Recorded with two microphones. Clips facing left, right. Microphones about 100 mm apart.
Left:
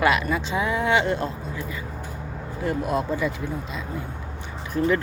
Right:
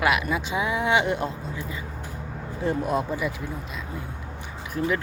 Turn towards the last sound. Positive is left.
turn(degrees=-5)  # may be behind; listen again after turning